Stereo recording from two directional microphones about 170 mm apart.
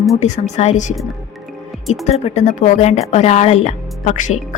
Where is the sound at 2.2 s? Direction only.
40° left (ahead or behind).